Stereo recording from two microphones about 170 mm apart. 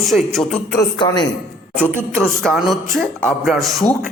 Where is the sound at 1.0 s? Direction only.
25° left (ahead or behind).